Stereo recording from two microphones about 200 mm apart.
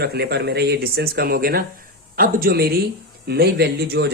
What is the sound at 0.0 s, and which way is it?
A man's voice, 55° right (ahead or behind).